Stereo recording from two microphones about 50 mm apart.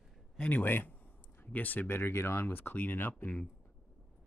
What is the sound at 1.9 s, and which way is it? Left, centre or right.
Speech, left.